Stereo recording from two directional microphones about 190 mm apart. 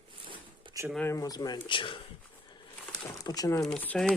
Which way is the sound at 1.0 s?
15° left (ahead or behind).